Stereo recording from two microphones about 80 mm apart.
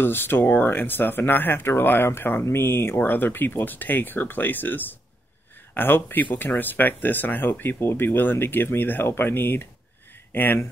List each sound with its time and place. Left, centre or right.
0.0 s speech: left